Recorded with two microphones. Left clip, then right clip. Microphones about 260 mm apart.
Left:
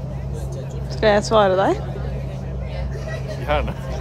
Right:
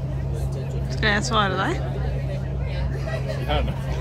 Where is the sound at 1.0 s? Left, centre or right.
Left.